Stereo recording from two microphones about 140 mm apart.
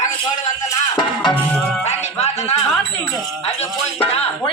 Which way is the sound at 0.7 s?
30° left (ahead or behind).